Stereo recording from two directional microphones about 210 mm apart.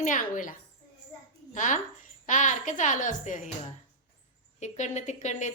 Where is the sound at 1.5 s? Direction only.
35° left (ahead or behind).